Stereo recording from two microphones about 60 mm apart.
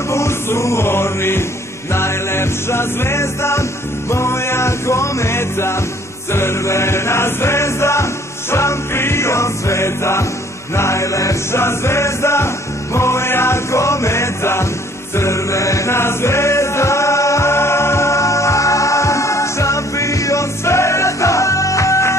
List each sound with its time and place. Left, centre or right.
0.1 s music: left
6.3 s chant: left
10.8 s music: left